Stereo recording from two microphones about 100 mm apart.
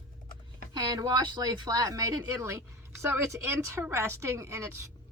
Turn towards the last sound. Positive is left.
turn(degrees=-30)  # may be behind; listen again after turning